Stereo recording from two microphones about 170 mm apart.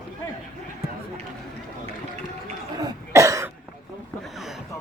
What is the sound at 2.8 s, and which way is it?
Cough, 20° right (ahead or behind).